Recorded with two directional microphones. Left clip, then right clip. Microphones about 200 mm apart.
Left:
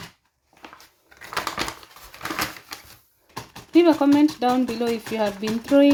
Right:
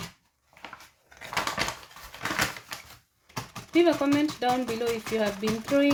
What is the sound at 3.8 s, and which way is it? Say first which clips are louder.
Speech: left 6 dB; 35° left (ahead or behind).